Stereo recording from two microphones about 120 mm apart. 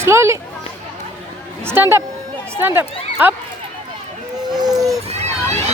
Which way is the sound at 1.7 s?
20° right (ahead or behind).